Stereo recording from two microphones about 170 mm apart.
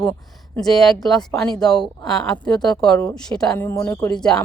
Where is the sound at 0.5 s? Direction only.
Centre (ahead or behind).